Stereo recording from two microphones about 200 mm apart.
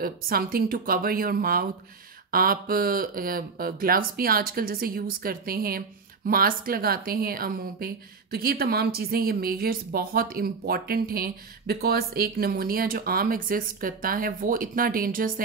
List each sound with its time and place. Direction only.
0.0 s speech: 45° right (ahead or behind)